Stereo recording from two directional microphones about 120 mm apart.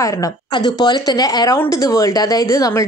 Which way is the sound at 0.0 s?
35° left (ahead or behind).